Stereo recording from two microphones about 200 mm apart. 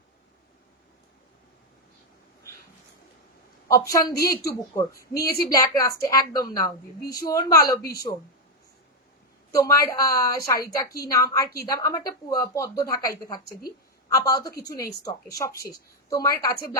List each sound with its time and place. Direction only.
3.7 s a woman's voice: 15° left (ahead or behind)
4.9 s a woman's voice: 50° left (ahead or behind)
5.5 s a woman's voice: 15° left (ahead or behind)
7.8 s a woman's voice: 50° left (ahead or behind)
9.6 s a woman's voice: 15° left (ahead or behind)